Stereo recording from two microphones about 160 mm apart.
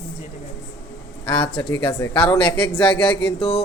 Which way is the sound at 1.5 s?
35° left (ahead or behind).